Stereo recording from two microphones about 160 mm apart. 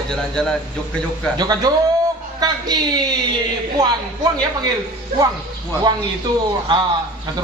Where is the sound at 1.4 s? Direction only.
25° right (ahead or behind).